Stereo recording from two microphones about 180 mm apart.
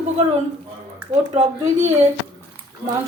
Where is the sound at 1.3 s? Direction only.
40° right (ahead or behind).